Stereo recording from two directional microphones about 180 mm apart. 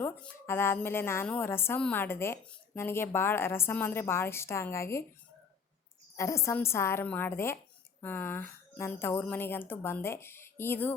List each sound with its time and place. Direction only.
0.0 s a woman's voice: 15° left (ahead or behind)
6.1 s a woman's voice: 15° left (ahead or behind)